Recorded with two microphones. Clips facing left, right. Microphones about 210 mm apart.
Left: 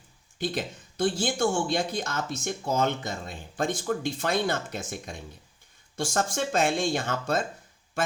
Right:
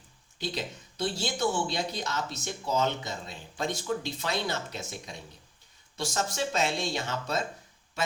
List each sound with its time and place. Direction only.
0.3 s speech: 50° left (ahead or behind)